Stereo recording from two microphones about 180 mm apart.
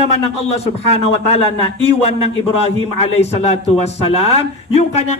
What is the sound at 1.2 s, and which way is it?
A man's voice, 35° left (ahead or behind).